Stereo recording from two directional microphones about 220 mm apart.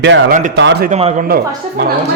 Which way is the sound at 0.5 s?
50° right (ahead or behind).